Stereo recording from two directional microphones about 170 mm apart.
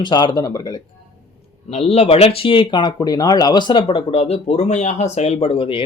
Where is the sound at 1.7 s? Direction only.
40° left (ahead or behind).